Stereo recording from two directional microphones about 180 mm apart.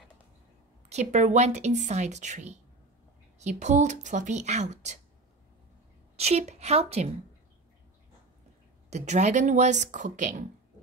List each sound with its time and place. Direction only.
0.8 s a woman's voice: 40° right (ahead or behind)
6.1 s a woman's voice: 35° right (ahead or behind)
8.9 s a woman's voice: 40° right (ahead or behind)